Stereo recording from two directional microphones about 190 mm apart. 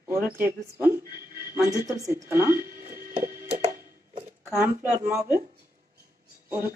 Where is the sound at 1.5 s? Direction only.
15° right (ahead or behind).